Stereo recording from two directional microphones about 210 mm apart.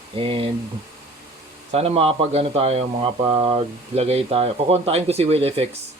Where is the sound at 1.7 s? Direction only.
30° right (ahead or behind).